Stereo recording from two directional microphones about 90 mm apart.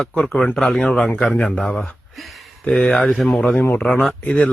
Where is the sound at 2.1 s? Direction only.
Centre (ahead or behind).